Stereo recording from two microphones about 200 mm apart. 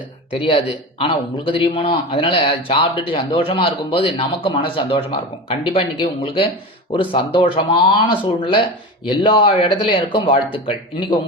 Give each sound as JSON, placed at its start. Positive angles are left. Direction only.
{"t": 0.3, "sound": "a man's voice", "side_deg": 25}